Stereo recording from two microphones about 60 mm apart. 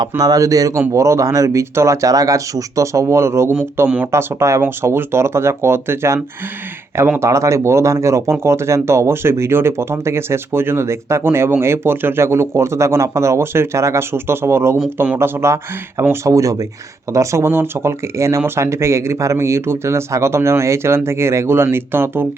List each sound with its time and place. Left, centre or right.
0.2 s speech: right
0.9 s speech: right
4.6 s speech: right
7.2 s speech: right
16.2 s speech: right
17.1 s speech: right
17.5 s speech: right